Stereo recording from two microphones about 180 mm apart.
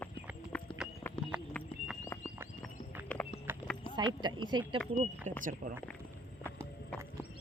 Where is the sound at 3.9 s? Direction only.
25° right (ahead or behind).